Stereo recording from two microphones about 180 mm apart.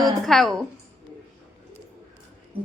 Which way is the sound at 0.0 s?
Centre (ahead or behind).